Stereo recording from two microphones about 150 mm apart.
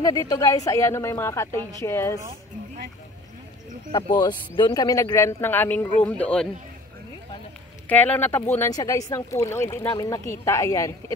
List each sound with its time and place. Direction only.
0.0 s a woman's voice: 25° left (ahead or behind)
3.9 s speech: 30° left (ahead or behind); by 6.5 s 5° left (ahead or behind)
7.9 s speech: 10° left (ahead or behind)